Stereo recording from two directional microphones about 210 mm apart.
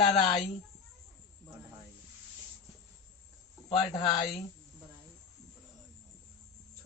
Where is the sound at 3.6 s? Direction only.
20° left (ahead or behind).